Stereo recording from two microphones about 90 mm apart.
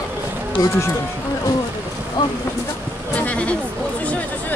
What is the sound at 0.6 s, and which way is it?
Speech, 30° left (ahead or behind).